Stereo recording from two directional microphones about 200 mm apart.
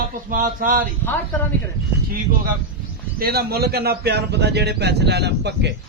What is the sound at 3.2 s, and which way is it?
A man's voice, 50° right (ahead or behind).